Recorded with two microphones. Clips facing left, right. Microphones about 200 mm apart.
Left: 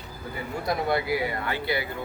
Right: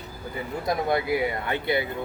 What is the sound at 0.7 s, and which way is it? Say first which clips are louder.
Speech: right 1 dB; 20° right (ahead or behind).